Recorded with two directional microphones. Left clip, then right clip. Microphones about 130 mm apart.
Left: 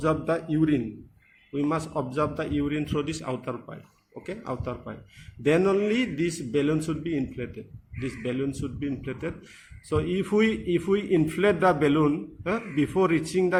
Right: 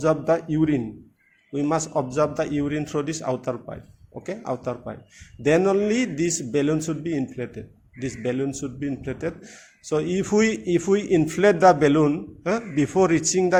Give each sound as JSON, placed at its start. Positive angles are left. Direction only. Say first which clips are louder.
{"t": 0.0, "sound": "a man's voice", "louder": "right 5 dB", "side_deg": -45}